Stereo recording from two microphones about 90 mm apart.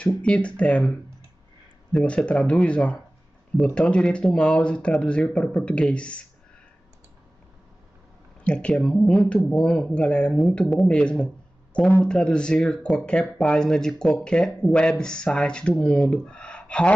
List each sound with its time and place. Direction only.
0.0 s speech: 15° left (ahead or behind)
8.4 s speech: 10° left (ahead or behind)